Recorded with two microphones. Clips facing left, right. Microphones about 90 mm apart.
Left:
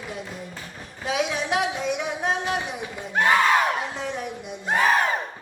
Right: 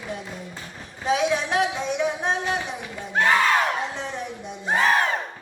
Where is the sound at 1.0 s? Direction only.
35° right (ahead or behind).